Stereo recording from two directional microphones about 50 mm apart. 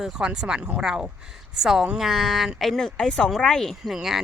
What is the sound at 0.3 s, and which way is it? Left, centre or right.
Speech, centre.